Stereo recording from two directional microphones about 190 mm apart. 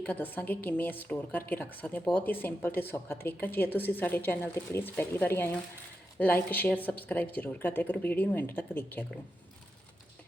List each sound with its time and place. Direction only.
0.0 s a woman's voice: 10° left (ahead or behind)